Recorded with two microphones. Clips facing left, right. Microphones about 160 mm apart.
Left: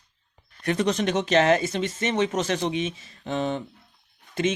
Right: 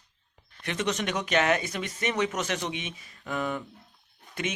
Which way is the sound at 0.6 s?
40° left (ahead or behind).